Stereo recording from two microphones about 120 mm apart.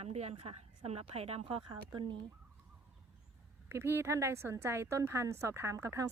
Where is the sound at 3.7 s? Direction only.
20° right (ahead or behind).